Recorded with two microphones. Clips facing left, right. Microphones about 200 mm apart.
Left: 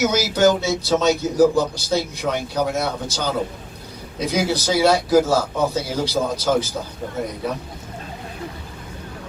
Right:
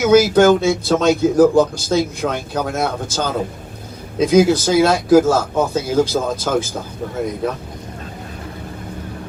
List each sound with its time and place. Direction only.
0.0 s speech: 55° right (ahead or behind)
4.3 s speech: 50° right (ahead or behind)